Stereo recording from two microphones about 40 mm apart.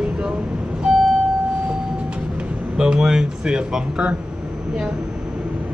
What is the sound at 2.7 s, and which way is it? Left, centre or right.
Speech, centre.